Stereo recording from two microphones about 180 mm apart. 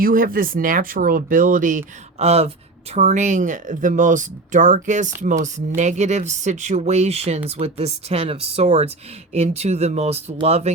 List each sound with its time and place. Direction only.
0.0 s speech: 50° right (ahead or behind); by 10.7 s 35° right (ahead or behind)